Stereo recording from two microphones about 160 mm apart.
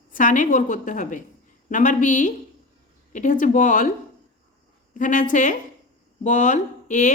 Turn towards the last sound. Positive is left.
turn(degrees=50)  # may be behind; listen again after turning